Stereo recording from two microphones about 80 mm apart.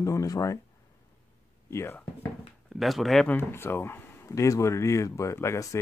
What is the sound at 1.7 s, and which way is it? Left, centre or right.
Speech, left.